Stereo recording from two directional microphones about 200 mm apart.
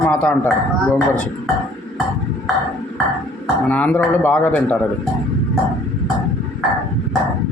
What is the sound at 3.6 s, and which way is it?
Speech, 5° left (ahead or behind).